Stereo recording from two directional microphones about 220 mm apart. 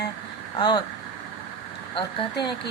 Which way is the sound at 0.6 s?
20° left (ahead or behind).